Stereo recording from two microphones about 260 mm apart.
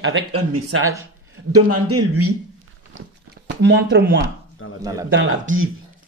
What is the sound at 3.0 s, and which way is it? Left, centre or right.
Speech, right.